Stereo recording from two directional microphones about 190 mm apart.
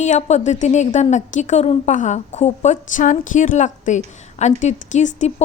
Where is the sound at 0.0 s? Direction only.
35° left (ahead or behind).